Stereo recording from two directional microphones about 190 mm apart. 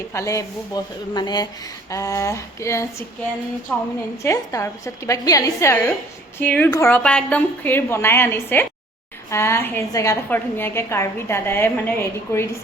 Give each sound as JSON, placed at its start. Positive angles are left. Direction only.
{"t": 0.1, "sound": "a woman's voice", "side_deg": 15}